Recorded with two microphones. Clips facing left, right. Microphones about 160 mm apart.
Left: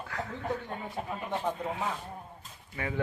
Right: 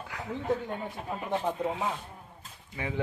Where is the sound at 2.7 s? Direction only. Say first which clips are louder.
Even; 15° right (ahead or behind).